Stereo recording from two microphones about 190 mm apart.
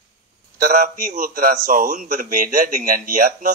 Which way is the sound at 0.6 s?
50° right (ahead or behind).